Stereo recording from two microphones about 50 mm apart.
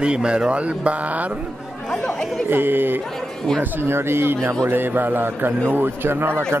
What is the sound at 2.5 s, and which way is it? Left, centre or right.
A man's voice, right.